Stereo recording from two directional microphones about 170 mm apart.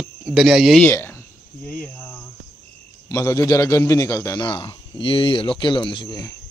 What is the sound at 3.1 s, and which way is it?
A man's voice, 20° left (ahead or behind).